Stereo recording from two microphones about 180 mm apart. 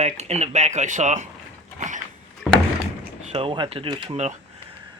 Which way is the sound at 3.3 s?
30° right (ahead or behind).